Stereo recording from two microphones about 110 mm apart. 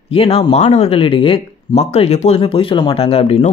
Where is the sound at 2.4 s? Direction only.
50° left (ahead or behind).